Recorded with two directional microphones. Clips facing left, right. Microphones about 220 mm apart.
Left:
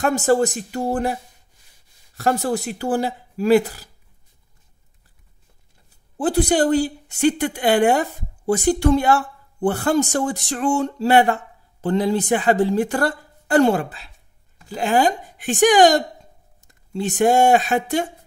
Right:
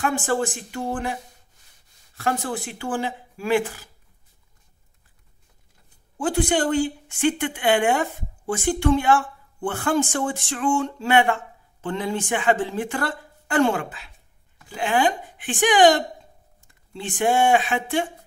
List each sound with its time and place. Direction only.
0.0 s speech: 40° left (ahead or behind)
2.1 s speech: 40° left (ahead or behind)
6.1 s speech: 35° left (ahead or behind)